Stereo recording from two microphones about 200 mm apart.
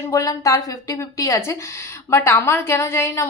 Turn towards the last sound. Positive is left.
turn(degrees=15)  # may be behind; listen again after turning